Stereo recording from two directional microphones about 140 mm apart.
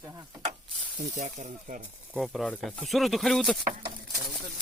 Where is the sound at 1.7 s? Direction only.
70° right (ahead or behind).